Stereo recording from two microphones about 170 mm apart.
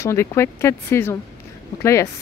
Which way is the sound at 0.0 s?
15° left (ahead or behind).